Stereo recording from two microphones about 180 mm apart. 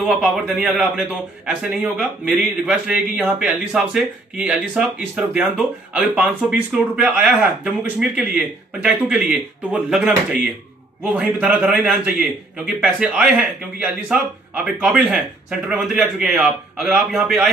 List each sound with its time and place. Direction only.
0.1 s a man's voice: 5° right (ahead or behind)